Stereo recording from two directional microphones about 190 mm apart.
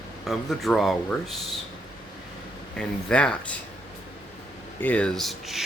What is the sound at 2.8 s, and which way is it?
Speech, 5° left (ahead or behind).